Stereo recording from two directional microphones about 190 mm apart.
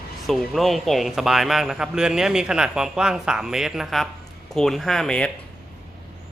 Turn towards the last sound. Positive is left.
turn(degrees=5)  # may be behind; listen again after turning